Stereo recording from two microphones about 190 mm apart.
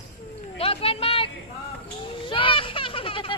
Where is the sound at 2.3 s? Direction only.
30° left (ahead or behind).